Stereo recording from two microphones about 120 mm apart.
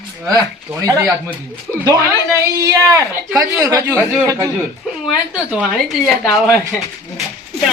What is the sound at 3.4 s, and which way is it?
A woman's voice, 30° right (ahead or behind).